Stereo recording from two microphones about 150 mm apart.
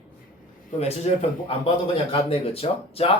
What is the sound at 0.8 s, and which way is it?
A man's voice, 45° left (ahead or behind).